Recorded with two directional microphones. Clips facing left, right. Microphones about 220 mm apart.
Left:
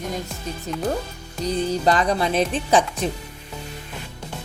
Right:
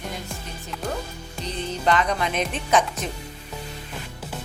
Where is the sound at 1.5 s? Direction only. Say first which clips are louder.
Left 4 dB; 40° left (ahead or behind).